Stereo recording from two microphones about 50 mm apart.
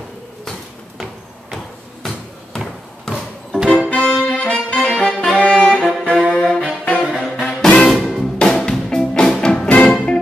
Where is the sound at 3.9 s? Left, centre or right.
Left.